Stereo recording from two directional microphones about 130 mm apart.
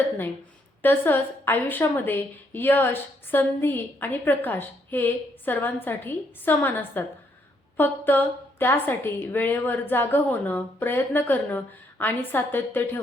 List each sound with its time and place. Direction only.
0.8 s a woman's voice: 15° left (ahead or behind)